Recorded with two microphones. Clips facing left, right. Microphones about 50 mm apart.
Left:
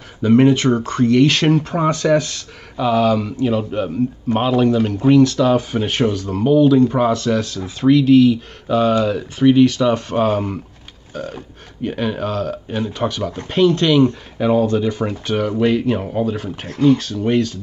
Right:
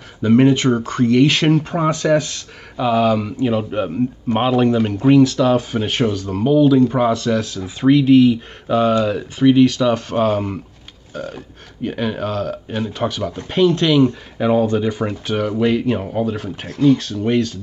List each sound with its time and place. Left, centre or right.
0.2 s speech: centre
7.8 s speech: centre
9.4 s speech: centre
11.8 s speech: centre
16.6 s speech: left
17.0 s speech: centre